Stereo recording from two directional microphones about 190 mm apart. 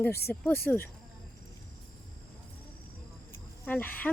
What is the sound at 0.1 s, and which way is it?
Speech, 55° left (ahead or behind).